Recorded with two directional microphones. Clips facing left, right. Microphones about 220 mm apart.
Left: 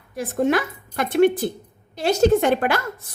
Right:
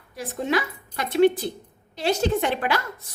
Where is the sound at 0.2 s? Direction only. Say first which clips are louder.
Left 5 dB; 50° left (ahead or behind).